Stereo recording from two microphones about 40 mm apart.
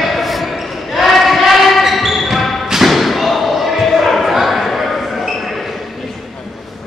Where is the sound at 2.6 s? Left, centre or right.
Centre.